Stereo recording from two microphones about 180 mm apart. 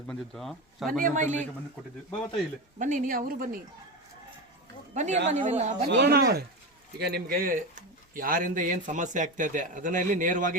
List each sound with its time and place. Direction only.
0.1 s speech: centre (ahead or behind)
1.0 s speech: 45° right (ahead or behind)
2.7 s speech: 45° right (ahead or behind)
4.9 s speech: 40° right (ahead or behind)
5.9 s speech: 65° right (ahead or behind); by 10.6 s 45° right (ahead or behind)